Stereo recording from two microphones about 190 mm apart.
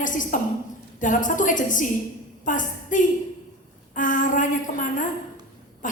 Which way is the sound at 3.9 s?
45° left (ahead or behind).